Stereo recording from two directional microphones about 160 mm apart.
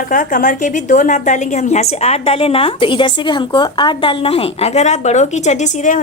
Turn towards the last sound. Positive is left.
turn(degrees=50)  # may be behind; listen again after turning